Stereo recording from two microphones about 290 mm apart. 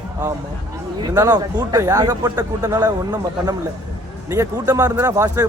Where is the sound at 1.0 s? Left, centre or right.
Centre.